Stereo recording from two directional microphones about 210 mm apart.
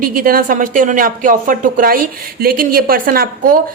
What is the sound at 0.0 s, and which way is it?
Speech, 40° right (ahead or behind).